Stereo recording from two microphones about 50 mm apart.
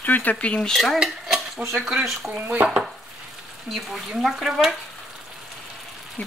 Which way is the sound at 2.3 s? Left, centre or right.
Right.